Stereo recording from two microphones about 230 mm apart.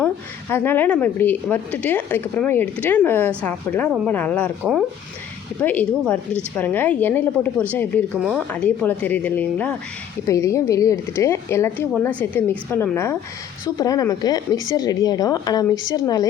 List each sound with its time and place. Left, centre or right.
0.0 s a woman's voice: centre
15.7 s speech: left
16.0 s a woman's voice: centre